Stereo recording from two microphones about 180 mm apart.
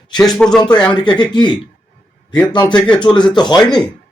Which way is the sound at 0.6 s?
20° left (ahead or behind).